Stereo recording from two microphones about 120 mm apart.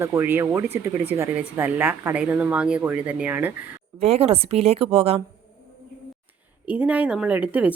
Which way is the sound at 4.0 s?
55° right (ahead or behind).